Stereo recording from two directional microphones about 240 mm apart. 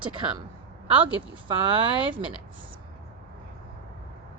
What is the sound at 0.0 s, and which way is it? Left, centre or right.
Speech, right.